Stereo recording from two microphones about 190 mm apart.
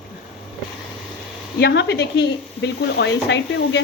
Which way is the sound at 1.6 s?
65° left (ahead or behind).